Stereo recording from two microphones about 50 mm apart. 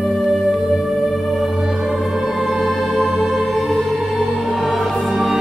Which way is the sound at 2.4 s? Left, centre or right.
Centre.